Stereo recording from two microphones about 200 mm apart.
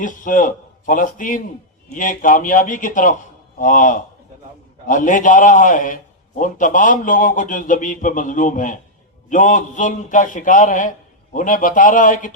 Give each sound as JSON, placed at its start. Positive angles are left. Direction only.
{"t": 0.0, "sound": "a man's voice", "side_deg": 40}